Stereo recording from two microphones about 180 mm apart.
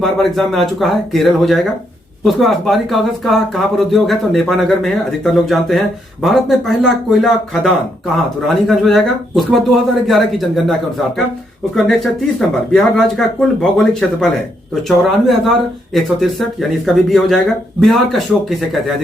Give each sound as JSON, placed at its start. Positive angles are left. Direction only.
{"t": 0.0, "sound": "speech", "side_deg": 0}